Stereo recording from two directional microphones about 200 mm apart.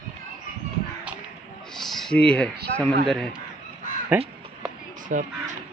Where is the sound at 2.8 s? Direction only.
Centre (ahead or behind).